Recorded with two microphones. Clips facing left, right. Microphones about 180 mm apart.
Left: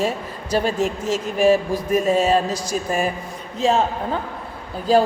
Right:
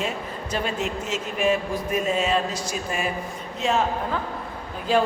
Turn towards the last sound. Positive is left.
turn(degrees=35)  # may be behind; listen again after turning